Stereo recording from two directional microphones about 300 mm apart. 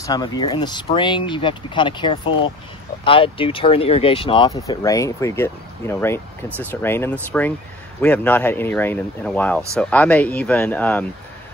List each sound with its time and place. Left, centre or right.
0.0 s speech: centre